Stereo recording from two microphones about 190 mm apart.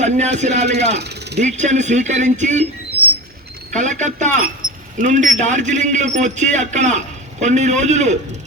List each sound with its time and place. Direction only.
0.0 s speech: 35° right (ahead or behind)
0.9 s speech: 60° right (ahead or behind)
1.4 s speech: 40° right (ahead or behind)
3.8 s speech: 40° right (ahead or behind)